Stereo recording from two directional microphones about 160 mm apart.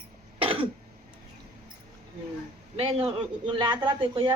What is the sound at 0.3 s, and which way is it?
Cough, 35° right (ahead or behind).